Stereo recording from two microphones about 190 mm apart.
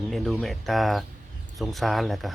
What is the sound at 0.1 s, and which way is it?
Speech, centre (ahead or behind).